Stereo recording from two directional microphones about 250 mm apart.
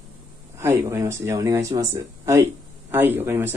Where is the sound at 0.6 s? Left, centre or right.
Centre.